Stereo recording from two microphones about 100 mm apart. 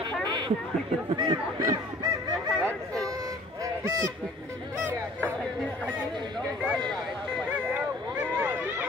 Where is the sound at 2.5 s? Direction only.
10° left (ahead or behind).